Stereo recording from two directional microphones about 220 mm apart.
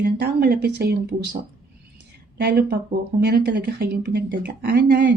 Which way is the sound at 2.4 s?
45° right (ahead or behind).